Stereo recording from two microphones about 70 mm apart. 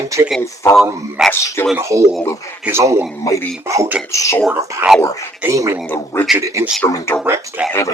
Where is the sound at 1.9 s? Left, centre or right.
Right.